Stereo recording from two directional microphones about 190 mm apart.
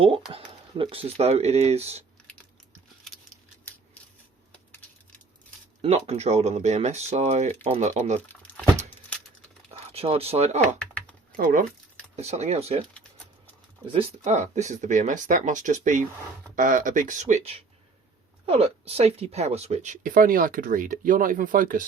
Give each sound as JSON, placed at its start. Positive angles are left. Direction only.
{"t": 0.3, "sound": "speech", "side_deg": -30}
{"t": 5.8, "sound": "speech", "side_deg": -35}
{"t": 8.3, "sound": "crumpling", "side_deg": 5}
{"t": 9.9, "sound": "speech", "side_deg": -30}
{"t": 10.8, "sound": "typing", "side_deg": 5}
{"t": 12.1, "sound": "speech", "side_deg": -35}
{"t": 13.9, "sound": "speech", "side_deg": -40}